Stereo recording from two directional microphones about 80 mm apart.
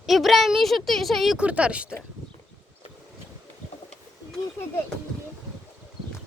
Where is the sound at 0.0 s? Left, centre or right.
Centre.